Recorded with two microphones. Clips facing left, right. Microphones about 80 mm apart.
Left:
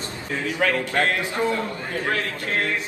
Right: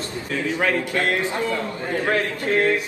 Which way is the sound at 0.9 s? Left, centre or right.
Left.